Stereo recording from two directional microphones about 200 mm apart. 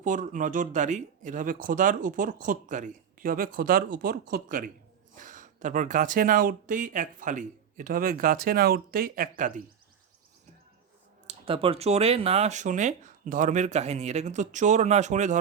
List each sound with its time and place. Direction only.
0.0 s speech: 40° right (ahead or behind)
11.3 s speech: 30° right (ahead or behind)